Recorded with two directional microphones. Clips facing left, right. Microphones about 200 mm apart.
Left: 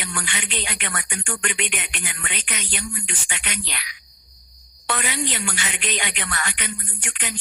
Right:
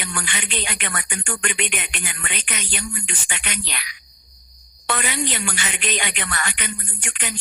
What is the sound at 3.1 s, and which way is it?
Speech, 55° right (ahead or behind).